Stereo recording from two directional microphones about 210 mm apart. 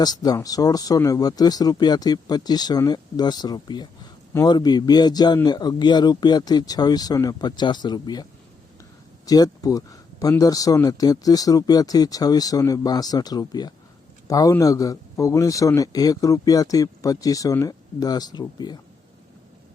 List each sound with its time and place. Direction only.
0.0 s speech: 20° left (ahead or behind)